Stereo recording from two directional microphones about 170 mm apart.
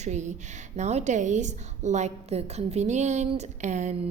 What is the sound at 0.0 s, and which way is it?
A woman's voice, 45° right (ahead or behind).